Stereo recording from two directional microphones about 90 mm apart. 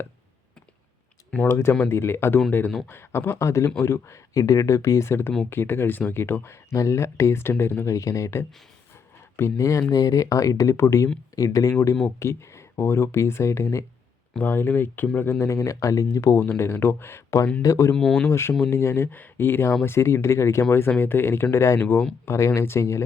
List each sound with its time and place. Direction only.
1.5 s speech: 30° left (ahead or behind)
16.4 s speech: 25° left (ahead or behind)
17.9 s speech: 5° left (ahead or behind)
18.3 s speech: 30° left (ahead or behind)